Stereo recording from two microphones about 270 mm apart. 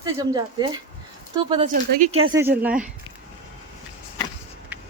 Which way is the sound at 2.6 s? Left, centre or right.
Centre.